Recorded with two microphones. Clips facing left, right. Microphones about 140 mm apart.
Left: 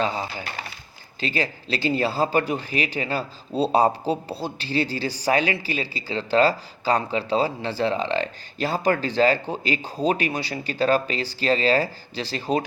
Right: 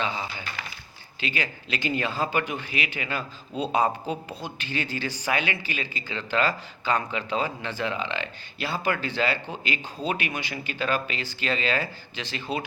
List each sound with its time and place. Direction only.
0.0 s speech: 40° left (ahead or behind)